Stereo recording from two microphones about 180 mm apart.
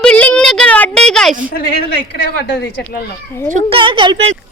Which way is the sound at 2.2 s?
70° left (ahead or behind).